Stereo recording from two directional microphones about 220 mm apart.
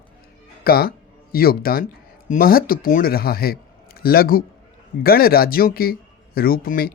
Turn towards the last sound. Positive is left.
turn(degrees=40)  # may be behind; listen again after turning